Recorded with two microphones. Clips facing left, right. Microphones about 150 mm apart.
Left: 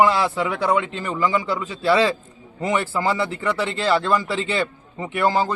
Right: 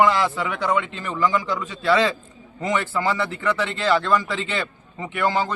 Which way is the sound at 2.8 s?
35° left (ahead or behind).